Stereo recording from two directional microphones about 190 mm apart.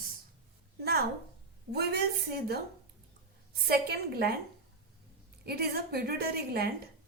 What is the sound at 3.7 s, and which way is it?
Speech, 55° right (ahead or behind).